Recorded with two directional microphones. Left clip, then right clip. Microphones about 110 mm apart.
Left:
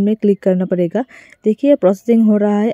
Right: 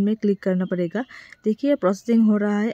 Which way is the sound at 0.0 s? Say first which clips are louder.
Left 8 dB; 25° left (ahead or behind).